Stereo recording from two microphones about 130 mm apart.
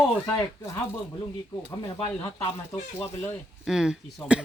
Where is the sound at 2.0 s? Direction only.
40° left (ahead or behind).